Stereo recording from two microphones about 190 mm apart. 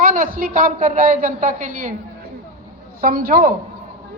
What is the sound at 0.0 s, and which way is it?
A woman's voice, 45° right (ahead or behind).